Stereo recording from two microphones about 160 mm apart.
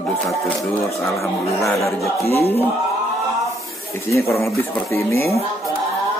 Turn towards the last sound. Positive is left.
turn(degrees=15)  # may be behind; listen again after turning